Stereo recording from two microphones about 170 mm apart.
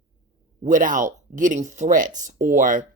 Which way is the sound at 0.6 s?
50° right (ahead or behind).